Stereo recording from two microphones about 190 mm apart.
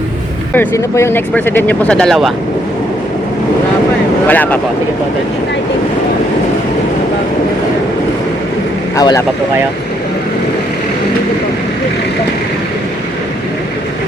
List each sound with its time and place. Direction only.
0.5 s speech: 10° left (ahead or behind)
4.3 s speech: 10° left (ahead or behind)
9.0 s speech: 20° left (ahead or behind)